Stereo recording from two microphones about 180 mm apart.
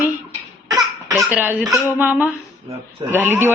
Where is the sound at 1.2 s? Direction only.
10° right (ahead or behind).